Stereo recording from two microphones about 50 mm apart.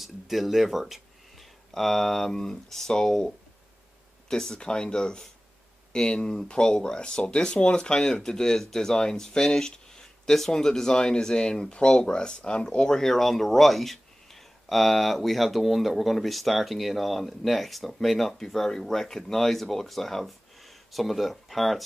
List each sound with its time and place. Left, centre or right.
0.0 s speech: centre